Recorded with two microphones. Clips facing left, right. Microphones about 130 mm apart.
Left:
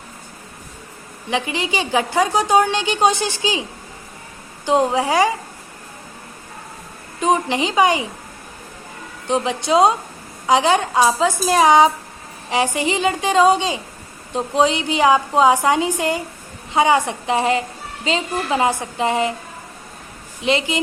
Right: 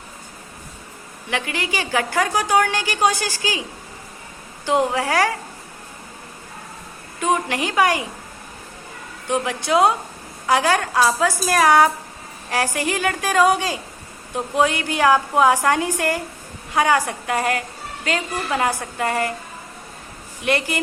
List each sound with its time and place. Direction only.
1.3 s a woman's voice: 15° left (ahead or behind)
4.6 s a woman's voice: 20° left (ahead or behind)
7.2 s a woman's voice: 20° left (ahead or behind)
9.2 s a woman's voice: 20° left (ahead or behind)
20.4 s a woman's voice: 20° left (ahead or behind)